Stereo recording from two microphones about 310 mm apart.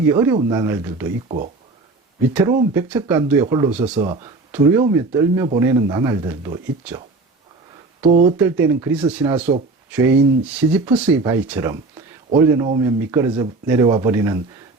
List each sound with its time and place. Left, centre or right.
0.1 s speech: centre
2.3 s speech: centre
8.0 s speech: right
8.4 s speech: centre